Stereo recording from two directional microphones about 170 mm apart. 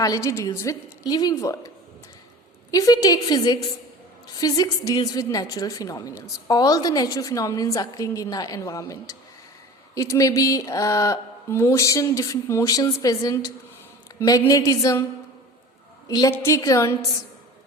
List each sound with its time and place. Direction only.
0.0 s a woman's voice: 20° left (ahead or behind)
2.7 s a woman's voice: 20° left (ahead or behind)
16.0 s a woman's voice: 20° left (ahead or behind)